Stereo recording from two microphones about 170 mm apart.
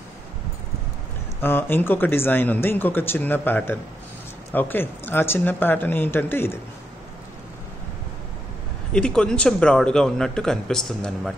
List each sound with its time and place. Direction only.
1.4 s speech: 15° left (ahead or behind)
8.9 s speech: 5° left (ahead or behind)